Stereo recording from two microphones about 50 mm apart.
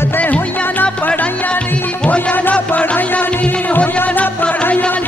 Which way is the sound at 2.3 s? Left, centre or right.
Left.